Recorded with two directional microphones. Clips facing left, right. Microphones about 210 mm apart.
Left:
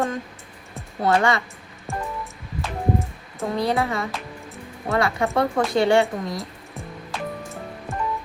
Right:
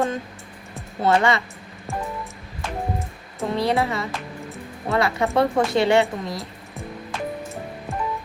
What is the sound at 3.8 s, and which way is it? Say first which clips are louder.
Speech: even; 25° right (ahead or behind).